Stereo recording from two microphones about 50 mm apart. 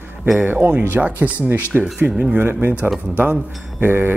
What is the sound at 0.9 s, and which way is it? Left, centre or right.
Speech, right.